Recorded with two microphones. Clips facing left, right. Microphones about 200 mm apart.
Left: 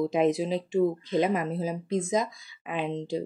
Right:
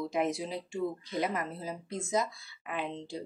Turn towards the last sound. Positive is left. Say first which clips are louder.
# left 7 dB
turn(degrees=15)  # may be behind; listen again after turning